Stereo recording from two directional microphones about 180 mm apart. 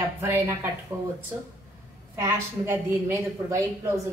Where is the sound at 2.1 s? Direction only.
15° right (ahead or behind).